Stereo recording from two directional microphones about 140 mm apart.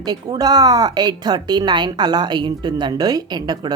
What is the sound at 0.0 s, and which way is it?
A woman's voice, 30° right (ahead or behind).